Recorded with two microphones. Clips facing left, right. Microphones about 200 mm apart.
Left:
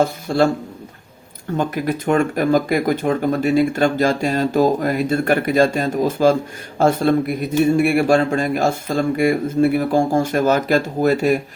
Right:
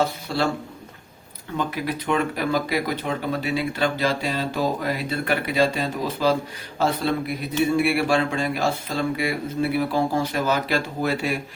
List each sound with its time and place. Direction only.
0.0 s speech: 50° left (ahead or behind)
1.5 s speech: 45° left (ahead or behind)